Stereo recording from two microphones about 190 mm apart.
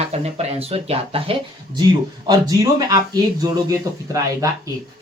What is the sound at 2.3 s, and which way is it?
A man's voice, 20° right (ahead or behind).